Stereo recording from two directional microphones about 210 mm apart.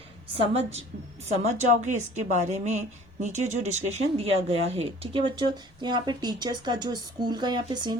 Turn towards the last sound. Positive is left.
turn(degrees=-20)  # may be behind; listen again after turning